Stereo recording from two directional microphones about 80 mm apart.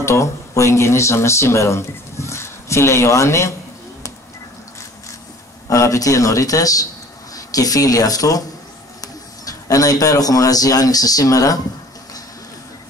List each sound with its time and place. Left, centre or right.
0.0 s speech: left
5.7 s a man's voice: left